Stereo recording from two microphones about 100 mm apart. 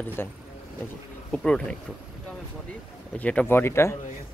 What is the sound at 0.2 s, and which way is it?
Speech, 25° left (ahead or behind).